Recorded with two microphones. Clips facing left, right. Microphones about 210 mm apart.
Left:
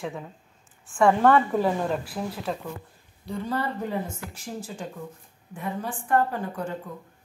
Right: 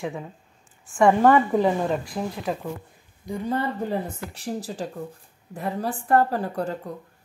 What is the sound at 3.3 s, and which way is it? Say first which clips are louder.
Speech: right 2 dB; 20° right (ahead or behind).